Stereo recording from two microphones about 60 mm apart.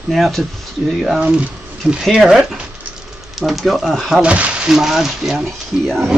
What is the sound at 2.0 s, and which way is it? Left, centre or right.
Speech, centre.